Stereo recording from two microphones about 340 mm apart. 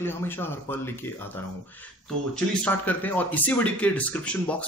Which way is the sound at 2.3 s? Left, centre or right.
Centre.